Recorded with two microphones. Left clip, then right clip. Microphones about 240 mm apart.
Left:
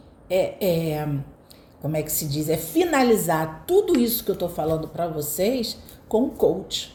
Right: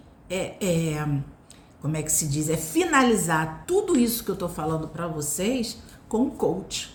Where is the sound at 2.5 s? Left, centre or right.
Centre.